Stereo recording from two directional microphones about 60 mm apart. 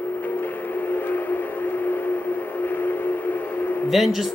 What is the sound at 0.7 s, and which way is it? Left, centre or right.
Vehicle, left.